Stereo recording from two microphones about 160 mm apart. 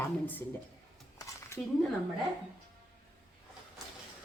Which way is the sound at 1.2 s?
15° left (ahead or behind).